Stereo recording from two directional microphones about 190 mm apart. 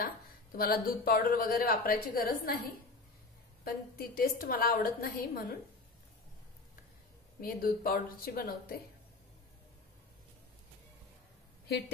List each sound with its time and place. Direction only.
0.6 s a woman's voice: 50° left (ahead or behind)
7.3 s a woman's voice: 50° left (ahead or behind)